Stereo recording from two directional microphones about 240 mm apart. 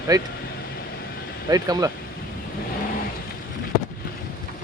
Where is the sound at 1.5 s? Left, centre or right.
Centre.